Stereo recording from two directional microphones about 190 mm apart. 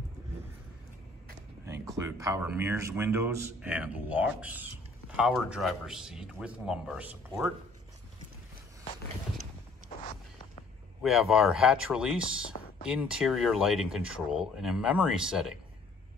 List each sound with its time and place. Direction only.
1.7 s speech: 15° right (ahead or behind)
11.0 s speech: centre (ahead or behind)